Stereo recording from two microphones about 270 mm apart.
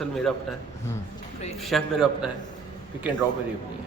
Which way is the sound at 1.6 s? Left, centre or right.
Centre.